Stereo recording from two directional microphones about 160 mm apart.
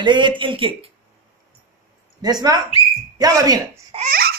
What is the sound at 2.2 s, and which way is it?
A man's voice, 25° right (ahead or behind).